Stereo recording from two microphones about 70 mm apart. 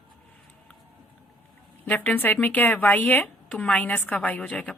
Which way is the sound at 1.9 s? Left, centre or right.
Left.